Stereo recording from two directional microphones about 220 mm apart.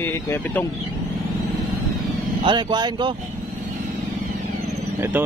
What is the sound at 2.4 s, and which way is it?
Speech, 20° right (ahead or behind).